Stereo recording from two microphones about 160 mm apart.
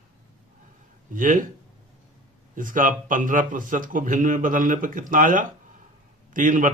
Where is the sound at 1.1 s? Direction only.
55° right (ahead or behind).